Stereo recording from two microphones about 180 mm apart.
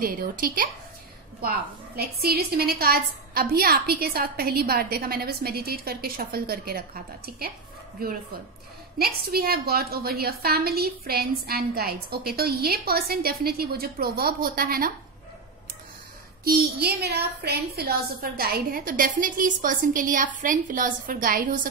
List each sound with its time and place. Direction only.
0.0 s a woman's voice: 55° right (ahead or behind)
2.0 s a woman's voice: 60° right (ahead or behind)
16.4 s a woman's voice: 65° right (ahead or behind)